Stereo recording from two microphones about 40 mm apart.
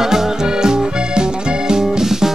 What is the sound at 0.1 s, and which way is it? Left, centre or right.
Music, centre.